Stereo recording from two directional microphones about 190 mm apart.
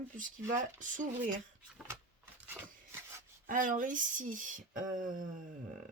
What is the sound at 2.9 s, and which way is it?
Rub, 10° right (ahead or behind).